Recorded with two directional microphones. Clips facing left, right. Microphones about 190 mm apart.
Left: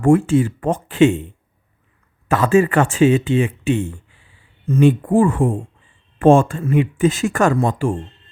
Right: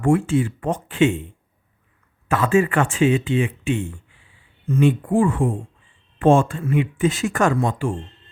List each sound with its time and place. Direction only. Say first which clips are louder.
0.0 s speech: left 4 dB; 45° left (ahead or behind)
2.3 s speech: left 4 dB; 40° left (ahead or behind)